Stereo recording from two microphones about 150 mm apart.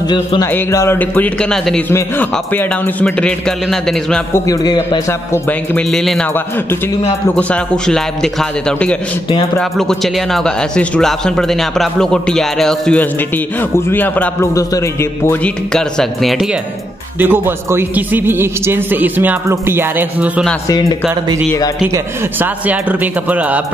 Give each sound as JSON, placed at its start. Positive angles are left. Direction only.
{"t": 0.1, "sound": "speech", "side_deg": 30}
{"t": 0.5, "sound": "a man's voice", "side_deg": 20}
{"t": 4.3, "sound": "a man's voice", "side_deg": 20}
{"t": 7.3, "sound": "a man's voice", "side_deg": 5}
{"t": 14.5, "sound": "speech", "side_deg": 20}
{"t": 15.7, "sound": "speech", "side_deg": 0}
{"t": 17.2, "sound": "a man's voice", "side_deg": -15}
{"t": 21.9, "sound": "a man's voice", "side_deg": -10}